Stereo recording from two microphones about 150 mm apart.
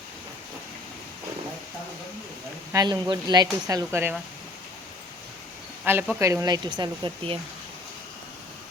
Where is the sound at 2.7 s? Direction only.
30° right (ahead or behind).